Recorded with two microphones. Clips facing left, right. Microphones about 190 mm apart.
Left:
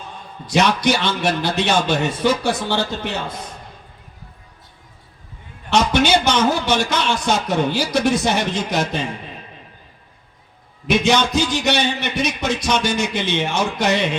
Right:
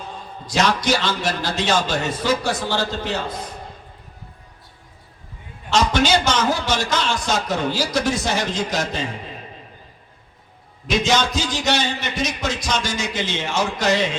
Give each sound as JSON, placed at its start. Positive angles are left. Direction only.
{"t": 0.4, "sound": "a man's voice", "side_deg": 60}
{"t": 5.9, "sound": "a man's voice", "side_deg": 60}
{"t": 10.8, "sound": "a man's voice", "side_deg": 60}